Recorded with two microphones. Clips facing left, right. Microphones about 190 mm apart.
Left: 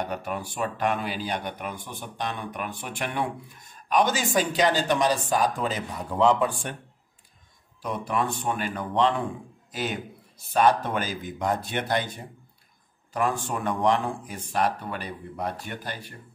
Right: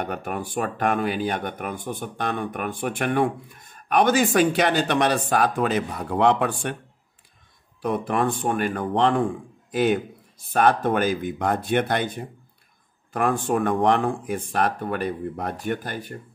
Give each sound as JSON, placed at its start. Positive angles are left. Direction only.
{"t": 0.0, "sound": "speech", "side_deg": -55}
{"t": 7.8, "sound": "speech", "side_deg": -55}
{"t": 13.1, "sound": "speech", "side_deg": -55}